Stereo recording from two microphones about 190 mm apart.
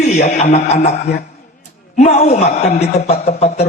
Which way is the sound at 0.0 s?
35° left (ahead or behind).